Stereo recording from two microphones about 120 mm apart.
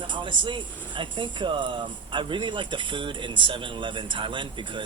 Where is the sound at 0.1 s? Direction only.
40° right (ahead or behind).